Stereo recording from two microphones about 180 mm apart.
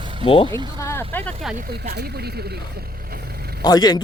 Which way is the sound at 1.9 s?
60° right (ahead or behind).